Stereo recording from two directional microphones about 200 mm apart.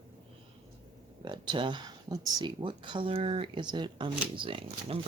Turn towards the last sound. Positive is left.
turn(degrees=-25)  # may be behind; listen again after turning